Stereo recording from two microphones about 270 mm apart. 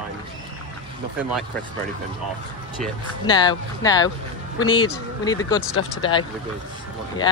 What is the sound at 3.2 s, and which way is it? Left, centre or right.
Speech, centre.